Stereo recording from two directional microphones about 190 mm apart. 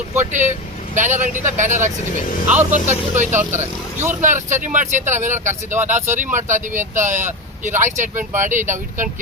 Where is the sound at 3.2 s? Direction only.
40° right (ahead or behind).